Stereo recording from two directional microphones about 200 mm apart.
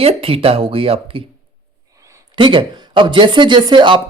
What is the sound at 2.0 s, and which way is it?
Speech, 15° right (ahead or behind).